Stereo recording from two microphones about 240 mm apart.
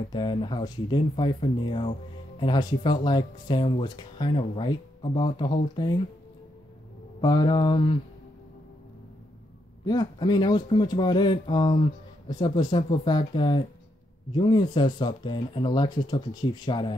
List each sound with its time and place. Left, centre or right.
0.1 s speech: centre
7.2 s speech: centre
9.8 s speech: centre